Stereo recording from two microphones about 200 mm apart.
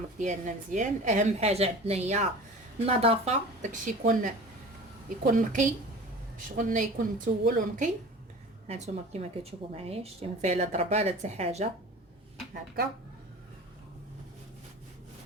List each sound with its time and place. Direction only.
0.2 s a woman's voice: 40° right (ahead or behind)